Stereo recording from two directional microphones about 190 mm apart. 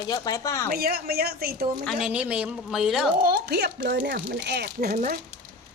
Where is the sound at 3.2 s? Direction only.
55° right (ahead or behind).